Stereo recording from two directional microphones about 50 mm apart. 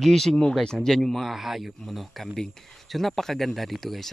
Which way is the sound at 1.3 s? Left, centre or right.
Centre.